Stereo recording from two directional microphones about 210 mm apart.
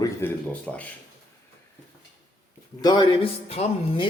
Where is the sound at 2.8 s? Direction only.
20° left (ahead or behind).